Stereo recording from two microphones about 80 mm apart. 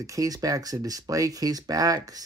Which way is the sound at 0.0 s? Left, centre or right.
Right.